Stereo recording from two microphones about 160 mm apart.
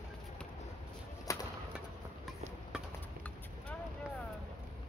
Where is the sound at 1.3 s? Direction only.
20° left (ahead or behind).